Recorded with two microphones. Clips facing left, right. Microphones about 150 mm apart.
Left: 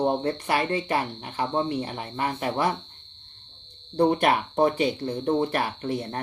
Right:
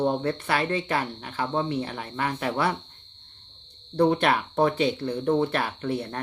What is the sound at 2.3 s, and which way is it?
Speech, 40° left (ahead or behind).